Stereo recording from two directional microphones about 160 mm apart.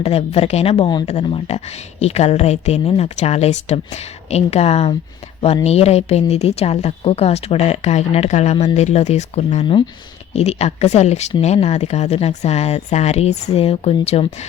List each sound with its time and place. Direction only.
0.0 s a woman's voice: 40° left (ahead or behind)